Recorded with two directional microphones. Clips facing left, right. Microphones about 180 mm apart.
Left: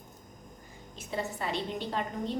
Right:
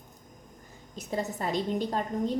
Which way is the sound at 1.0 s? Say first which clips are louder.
Right 3 dB; 40° right (ahead or behind).